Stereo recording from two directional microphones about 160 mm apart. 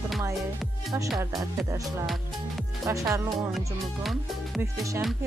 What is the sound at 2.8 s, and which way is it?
Music, 20° right (ahead or behind).